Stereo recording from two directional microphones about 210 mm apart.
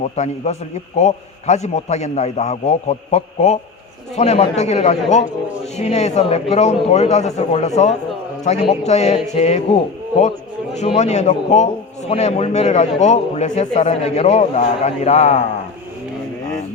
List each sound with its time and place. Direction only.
0.0 s a man's voice: 30° left (ahead or behind)